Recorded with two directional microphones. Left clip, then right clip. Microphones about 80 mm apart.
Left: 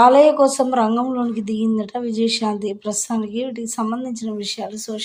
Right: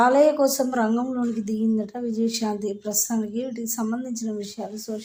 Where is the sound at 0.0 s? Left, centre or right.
Left.